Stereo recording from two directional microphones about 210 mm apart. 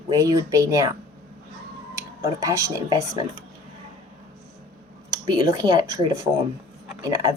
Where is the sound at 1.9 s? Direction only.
15° right (ahead or behind).